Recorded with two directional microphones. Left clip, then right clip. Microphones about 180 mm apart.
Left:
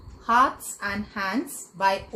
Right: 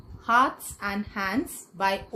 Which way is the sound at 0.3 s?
50° right (ahead or behind).